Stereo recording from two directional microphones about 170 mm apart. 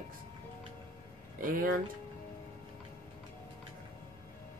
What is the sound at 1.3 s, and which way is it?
Speech, 55° right (ahead or behind).